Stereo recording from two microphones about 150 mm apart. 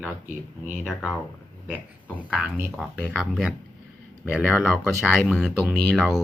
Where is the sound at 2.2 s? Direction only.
5° right (ahead or behind).